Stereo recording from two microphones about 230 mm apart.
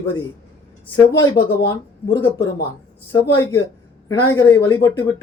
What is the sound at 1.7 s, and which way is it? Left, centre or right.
Speech, centre.